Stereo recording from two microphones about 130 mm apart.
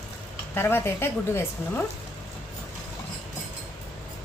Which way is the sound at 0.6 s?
20° left (ahead or behind).